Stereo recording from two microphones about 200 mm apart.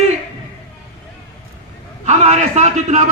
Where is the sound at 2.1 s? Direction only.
35° right (ahead or behind).